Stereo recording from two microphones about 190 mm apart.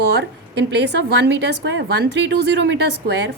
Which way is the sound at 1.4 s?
65° right (ahead or behind).